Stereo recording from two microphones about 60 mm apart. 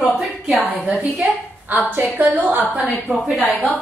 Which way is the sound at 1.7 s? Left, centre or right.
Right.